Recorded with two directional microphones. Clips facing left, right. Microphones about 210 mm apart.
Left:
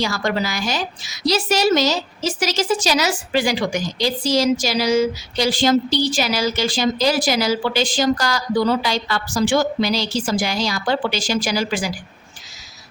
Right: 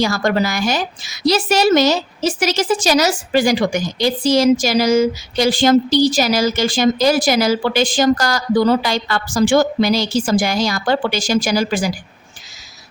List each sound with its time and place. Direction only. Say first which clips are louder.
0.0 s a woman's voice: right 5 dB; 50° right (ahead or behind)